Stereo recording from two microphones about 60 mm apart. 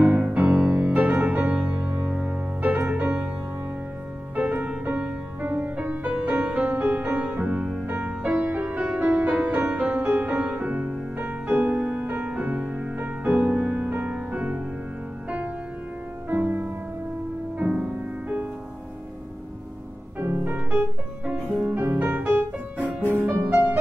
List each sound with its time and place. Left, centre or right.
0.0 s music: right
4.4 s music: right
16.3 s music: right
17.6 s music: centre
20.2 s music: right
21.3 s music: right